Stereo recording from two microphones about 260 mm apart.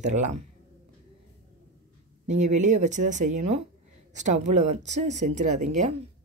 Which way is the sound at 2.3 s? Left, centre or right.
Right.